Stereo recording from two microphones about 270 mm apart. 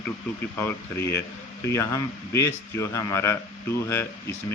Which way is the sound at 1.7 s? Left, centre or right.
Centre.